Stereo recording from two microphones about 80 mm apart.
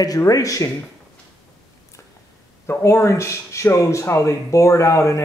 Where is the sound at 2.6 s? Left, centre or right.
Left.